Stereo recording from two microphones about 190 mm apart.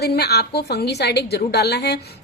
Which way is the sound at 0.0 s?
60° left (ahead or behind).